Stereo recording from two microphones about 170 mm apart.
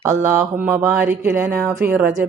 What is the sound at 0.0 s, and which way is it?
Speech, 15° right (ahead or behind).